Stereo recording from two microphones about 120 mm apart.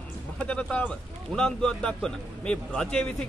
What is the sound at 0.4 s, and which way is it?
A man's voice, 10° left (ahead or behind).